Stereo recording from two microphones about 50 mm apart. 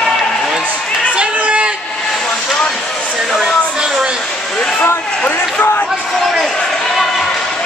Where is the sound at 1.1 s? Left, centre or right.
Right.